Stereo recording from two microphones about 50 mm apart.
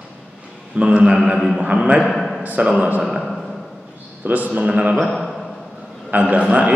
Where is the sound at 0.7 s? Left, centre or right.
Right.